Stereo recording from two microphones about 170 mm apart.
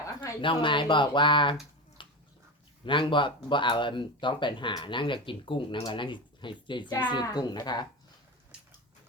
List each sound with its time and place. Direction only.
0.4 s speech: 30° left (ahead or behind)
2.0 s bathtub: 30° left (ahead or behind)
2.8 s speech: 30° left (ahead or behind)
8.5 s a sound: 5° right (ahead or behind)